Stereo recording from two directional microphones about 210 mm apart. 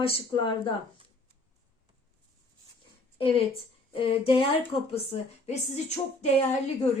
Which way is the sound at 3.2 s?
25° left (ahead or behind).